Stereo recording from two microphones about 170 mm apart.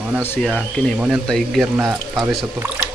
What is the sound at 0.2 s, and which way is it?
Speech, 10° left (ahead or behind).